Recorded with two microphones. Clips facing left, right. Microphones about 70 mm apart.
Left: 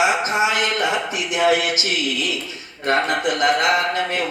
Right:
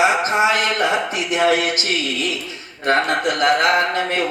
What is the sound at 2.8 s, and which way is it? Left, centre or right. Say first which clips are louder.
Speech: right 2 dB; right.